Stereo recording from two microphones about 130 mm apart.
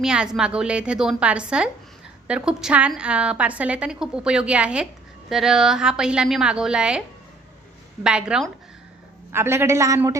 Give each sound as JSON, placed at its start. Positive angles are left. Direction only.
{"t": 0.0, "sound": "a woman's voice", "side_deg": -5}
{"t": 8.0, "sound": "a woman's voice", "side_deg": -5}
{"t": 9.3, "sound": "a woman's voice", "side_deg": -20}